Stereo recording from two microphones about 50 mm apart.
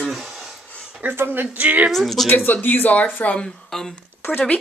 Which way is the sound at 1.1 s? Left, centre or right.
Right.